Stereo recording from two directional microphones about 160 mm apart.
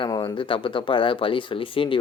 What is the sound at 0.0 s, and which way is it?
Speech, 30° left (ahead or behind).